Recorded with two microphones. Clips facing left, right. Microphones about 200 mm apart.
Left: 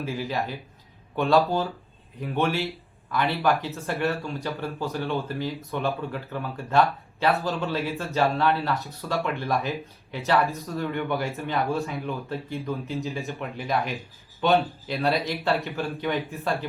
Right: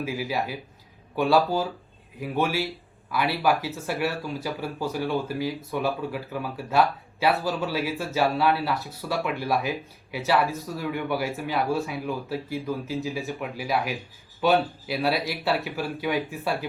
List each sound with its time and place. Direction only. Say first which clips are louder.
0.0 s speech: right 1 dB; 10° right (ahead or behind)